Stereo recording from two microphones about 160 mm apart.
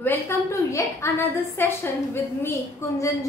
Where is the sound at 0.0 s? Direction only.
15° left (ahead or behind).